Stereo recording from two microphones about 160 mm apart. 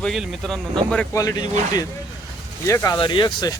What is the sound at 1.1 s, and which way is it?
Speech, 20° left (ahead or behind).